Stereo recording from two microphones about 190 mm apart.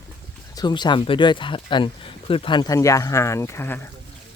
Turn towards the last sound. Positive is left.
turn(degrees=15)  # may be behind; listen again after turning